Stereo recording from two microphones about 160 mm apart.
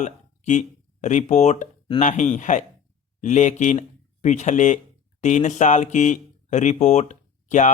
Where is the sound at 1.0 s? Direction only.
45° left (ahead or behind).